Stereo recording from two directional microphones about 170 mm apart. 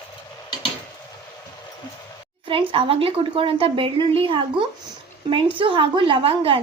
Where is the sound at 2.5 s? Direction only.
30° right (ahead or behind).